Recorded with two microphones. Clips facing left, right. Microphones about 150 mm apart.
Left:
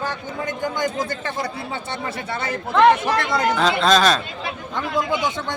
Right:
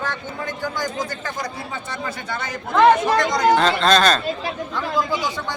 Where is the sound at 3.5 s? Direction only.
5° left (ahead or behind).